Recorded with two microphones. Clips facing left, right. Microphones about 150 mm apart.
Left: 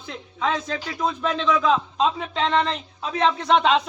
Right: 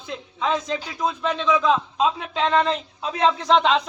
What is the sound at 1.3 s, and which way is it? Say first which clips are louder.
A man's voice: right 1 dB; 10° right (ahead or behind).